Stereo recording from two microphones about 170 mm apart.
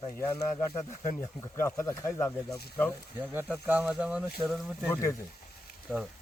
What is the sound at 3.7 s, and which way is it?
Speech, 10° right (ahead or behind).